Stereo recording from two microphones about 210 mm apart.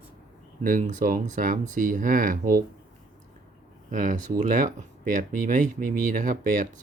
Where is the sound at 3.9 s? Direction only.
35° right (ahead or behind).